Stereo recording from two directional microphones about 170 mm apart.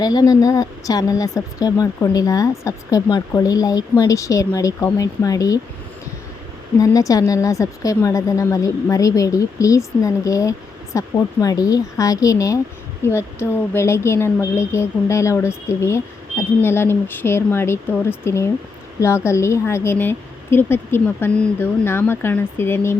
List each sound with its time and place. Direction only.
0.0 s speech: 25° left (ahead or behind)
6.7 s a woman's voice: 20° left (ahead or behind)